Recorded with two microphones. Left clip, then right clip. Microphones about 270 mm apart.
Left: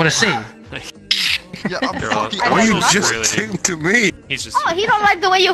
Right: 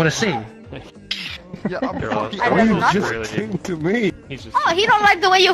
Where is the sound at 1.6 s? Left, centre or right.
Left.